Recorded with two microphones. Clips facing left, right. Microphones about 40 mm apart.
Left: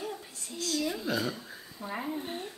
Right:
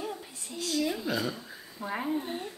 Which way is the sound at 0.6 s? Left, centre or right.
Right.